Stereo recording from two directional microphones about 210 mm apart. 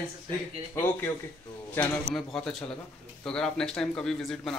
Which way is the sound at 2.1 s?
Centre (ahead or behind).